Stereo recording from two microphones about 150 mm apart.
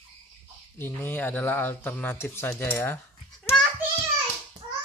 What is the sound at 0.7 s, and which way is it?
Speech, 15° left (ahead or behind).